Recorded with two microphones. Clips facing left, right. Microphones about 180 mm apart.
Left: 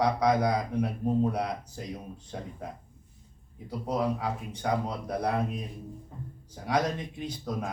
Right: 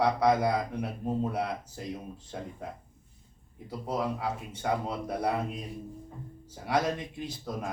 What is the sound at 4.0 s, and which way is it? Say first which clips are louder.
Speech: left 2 dB; 5° right (ahead or behind).